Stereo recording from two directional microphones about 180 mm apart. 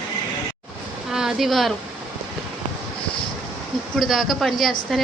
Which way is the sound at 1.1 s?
5° right (ahead or behind).